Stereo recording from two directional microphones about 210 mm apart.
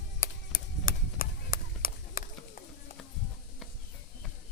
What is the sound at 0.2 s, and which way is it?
Chop, 40° left (ahead or behind).